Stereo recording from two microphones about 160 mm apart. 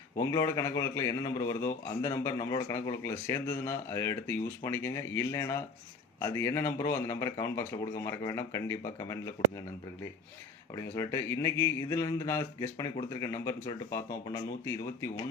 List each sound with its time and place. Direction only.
0.2 s a man's voice: 20° left (ahead or behind)
10.8 s a man's voice: 20° left (ahead or behind)